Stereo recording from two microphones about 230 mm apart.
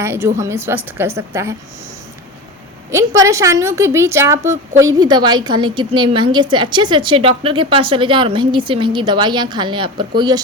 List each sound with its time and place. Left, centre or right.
0.0 s a woman's voice: centre
2.9 s a woman's voice: centre